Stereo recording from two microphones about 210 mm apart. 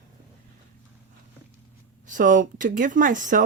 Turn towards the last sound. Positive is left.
turn(degrees=-40)  # may be behind; listen again after turning